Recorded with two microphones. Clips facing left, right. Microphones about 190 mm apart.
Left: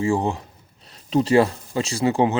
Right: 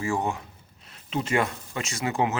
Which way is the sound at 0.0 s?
30° left (ahead or behind).